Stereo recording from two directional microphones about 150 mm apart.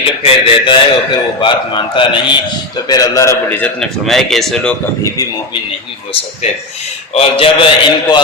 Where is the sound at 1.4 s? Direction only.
35° left (ahead or behind); by 3.7 s 15° left (ahead or behind).